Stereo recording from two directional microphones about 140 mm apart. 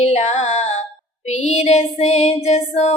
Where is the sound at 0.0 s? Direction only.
55° left (ahead or behind).